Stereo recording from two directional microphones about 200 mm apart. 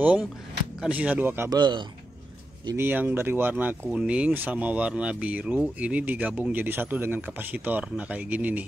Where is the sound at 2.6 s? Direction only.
10° right (ahead or behind).